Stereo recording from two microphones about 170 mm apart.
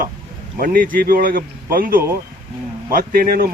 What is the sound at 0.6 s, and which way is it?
Speech, 55° right (ahead or behind).